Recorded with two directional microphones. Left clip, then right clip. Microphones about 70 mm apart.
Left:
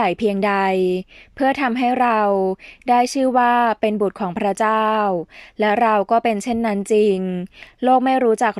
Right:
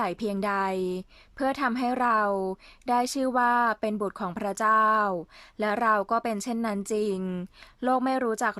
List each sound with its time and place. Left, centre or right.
0.0 s a woman's voice: left